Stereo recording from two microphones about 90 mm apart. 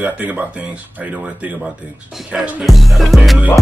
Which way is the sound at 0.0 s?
20° right (ahead or behind).